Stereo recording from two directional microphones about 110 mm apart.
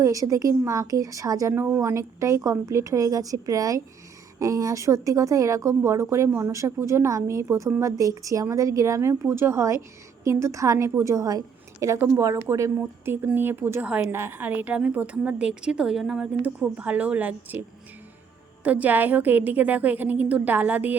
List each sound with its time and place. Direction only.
0.0 s a woman's voice: 30° right (ahead or behind)
1.5 s a woman's voice: 20° right (ahead or behind)
13.8 s a woman's voice: 10° right (ahead or behind)
14.1 s a woman's voice: 20° right (ahead or behind)
18.6 s a woman's voice: 15° right (ahead or behind)